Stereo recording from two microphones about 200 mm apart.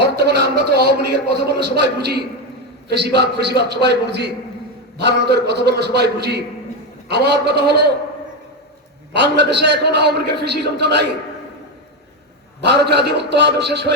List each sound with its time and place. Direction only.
0.0 s a man's voice: 55° right (ahead or behind)
9.1 s a man's voice: 60° right (ahead or behind)
12.6 s a man's voice: 55° right (ahead or behind)